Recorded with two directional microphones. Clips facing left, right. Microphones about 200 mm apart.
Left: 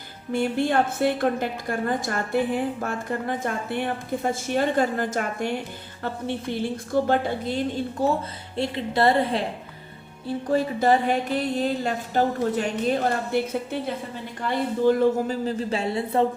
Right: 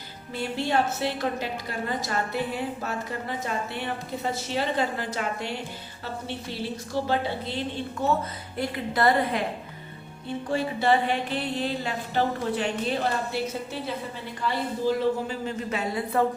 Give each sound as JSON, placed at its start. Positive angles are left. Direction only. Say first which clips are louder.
{"t": 0.3, "sound": "a woman's voice", "louder": "left 4 dB", "side_deg": 50}
{"t": 8.5, "sound": "a woman's voice", "louder": "left 3 dB", "side_deg": 25}
{"t": 10.2, "sound": "a woman's voice", "louder": "left 4 dB", "side_deg": 40}